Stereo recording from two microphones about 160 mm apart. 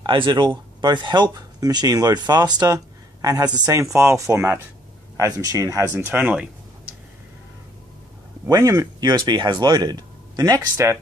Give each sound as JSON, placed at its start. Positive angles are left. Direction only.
{"t": 0.0, "sound": "speech", "side_deg": -30}
{"t": 8.5, "sound": "speech", "side_deg": -20}